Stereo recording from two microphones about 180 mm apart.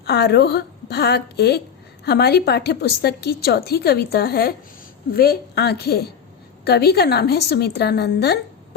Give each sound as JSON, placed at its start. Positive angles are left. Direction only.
{"t": 0.0, "sound": "a woman's voice", "side_deg": 65}